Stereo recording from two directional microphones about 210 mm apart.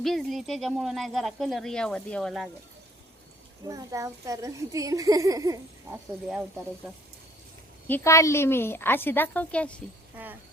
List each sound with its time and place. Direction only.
0.0 s speech: centre (ahead or behind)
3.7 s a child's voice: 15° right (ahead or behind)
7.9 s a woman's voice: 10° left (ahead or behind)